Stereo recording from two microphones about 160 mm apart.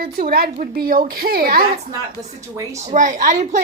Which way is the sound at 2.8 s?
50° right (ahead or behind).